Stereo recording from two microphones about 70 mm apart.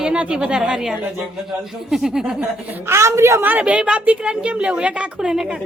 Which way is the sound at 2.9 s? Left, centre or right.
Right.